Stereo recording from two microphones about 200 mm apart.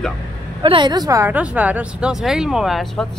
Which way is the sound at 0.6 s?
25° right (ahead or behind).